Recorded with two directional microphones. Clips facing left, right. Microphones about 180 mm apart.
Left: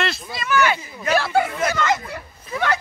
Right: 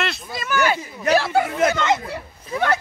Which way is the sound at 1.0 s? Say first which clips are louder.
Right 1 dB; 30° right (ahead or behind).